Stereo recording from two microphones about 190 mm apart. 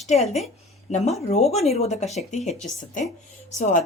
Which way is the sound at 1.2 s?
35° left (ahead or behind).